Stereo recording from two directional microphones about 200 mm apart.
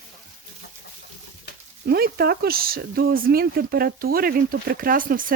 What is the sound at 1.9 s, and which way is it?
Speech, 50° right (ahead or behind).